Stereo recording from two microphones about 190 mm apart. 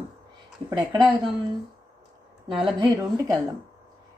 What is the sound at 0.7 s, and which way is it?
Speech, 20° right (ahead or behind).